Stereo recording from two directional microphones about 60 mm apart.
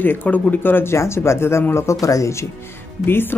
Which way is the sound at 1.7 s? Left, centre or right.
Left.